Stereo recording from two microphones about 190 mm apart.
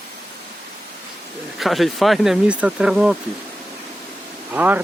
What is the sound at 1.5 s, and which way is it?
Speech, centre (ahead or behind).